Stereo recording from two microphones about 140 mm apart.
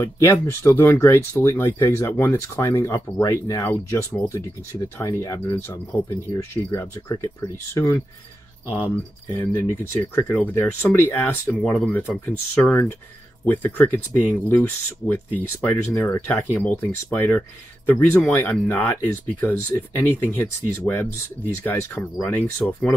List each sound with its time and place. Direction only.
0.0 s speech: 20° left (ahead or behind)
9.3 s speech: 15° left (ahead or behind)